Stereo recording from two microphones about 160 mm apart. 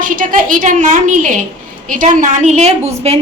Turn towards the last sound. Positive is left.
turn(degrees=-40)  # may be behind; listen again after turning